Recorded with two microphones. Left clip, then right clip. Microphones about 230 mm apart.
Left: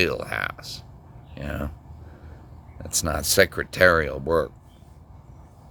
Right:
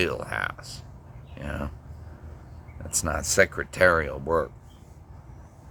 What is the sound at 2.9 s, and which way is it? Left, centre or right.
Speech, left.